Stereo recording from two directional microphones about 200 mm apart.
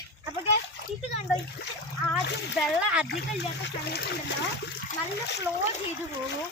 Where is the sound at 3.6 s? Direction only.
55° left (ahead or behind).